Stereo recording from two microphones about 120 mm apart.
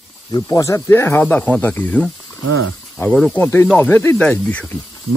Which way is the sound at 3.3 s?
15° left (ahead or behind).